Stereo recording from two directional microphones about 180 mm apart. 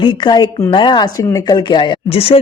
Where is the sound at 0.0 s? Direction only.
25° left (ahead or behind).